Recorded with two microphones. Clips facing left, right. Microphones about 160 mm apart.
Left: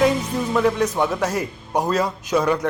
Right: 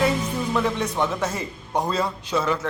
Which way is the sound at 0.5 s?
10° left (ahead or behind).